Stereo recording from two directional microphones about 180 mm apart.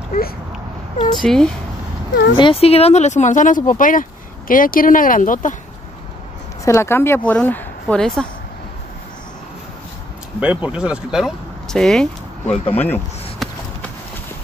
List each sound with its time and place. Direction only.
0.1 s a sound: 55° left (ahead or behind)
1.1 s speech: 5° left (ahead or behind)
2.3 s speech: 30° left (ahead or behind); by 5.6 s 45° left (ahead or behind)
6.6 s speech: 15° left (ahead or behind)
10.4 s speech: 10° right (ahead or behind); by 13.5 s 10° left (ahead or behind)